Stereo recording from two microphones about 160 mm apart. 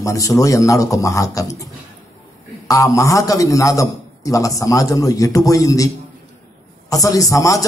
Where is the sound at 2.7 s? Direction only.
20° left (ahead or behind).